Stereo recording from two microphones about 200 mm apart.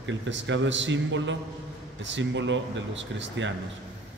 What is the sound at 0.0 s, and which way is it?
A man's voice, 65° right (ahead or behind).